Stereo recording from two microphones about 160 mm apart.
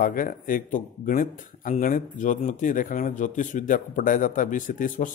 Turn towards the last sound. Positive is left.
turn(degrees=55)  # may be behind; listen again after turning